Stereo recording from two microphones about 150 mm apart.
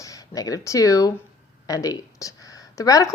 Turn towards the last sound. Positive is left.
turn(degrees=20)  # may be behind; listen again after turning